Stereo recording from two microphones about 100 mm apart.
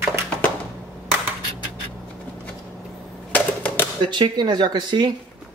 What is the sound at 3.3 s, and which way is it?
Typewriter, 15° left (ahead or behind).